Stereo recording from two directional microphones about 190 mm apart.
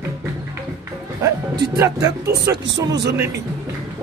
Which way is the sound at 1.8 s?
15° right (ahead or behind).